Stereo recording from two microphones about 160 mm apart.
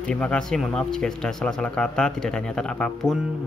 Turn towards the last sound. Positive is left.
turn(degrees=5)  # may be behind; listen again after turning